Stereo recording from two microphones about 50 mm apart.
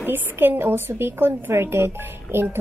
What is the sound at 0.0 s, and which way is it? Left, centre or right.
Speech, right.